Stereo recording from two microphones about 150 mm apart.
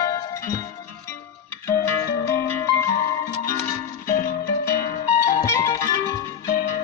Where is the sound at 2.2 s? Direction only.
20° left (ahead or behind).